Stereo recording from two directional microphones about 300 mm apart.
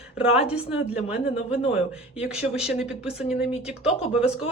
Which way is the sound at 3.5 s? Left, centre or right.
Centre.